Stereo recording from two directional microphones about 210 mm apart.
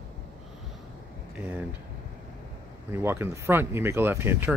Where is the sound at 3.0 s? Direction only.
10° right (ahead or behind).